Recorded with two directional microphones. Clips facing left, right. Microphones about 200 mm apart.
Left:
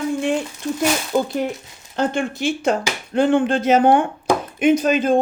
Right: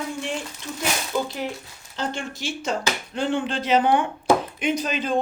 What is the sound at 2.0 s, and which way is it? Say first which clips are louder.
Speech: left 8 dB; 55° left (ahead or behind).